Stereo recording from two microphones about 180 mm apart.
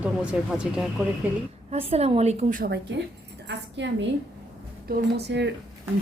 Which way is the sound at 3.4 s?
80° right.